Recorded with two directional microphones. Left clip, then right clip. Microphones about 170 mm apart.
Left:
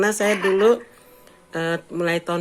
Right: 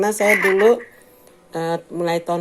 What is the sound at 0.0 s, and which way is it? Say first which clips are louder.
Speech: right 1 dB; 10° left (ahead or behind).